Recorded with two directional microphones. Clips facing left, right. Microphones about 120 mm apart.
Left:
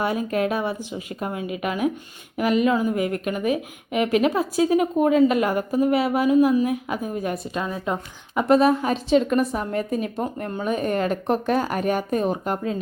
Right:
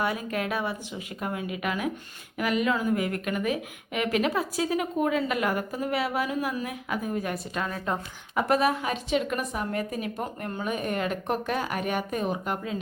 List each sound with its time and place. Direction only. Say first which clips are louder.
0.0 s speech: left 6 dB; 30° left (ahead or behind)
8.4 s a woman's voice: left 6 dB; 25° left (ahead or behind)